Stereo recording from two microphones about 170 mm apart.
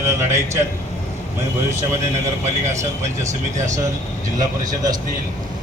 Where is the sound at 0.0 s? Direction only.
15° right (ahead or behind).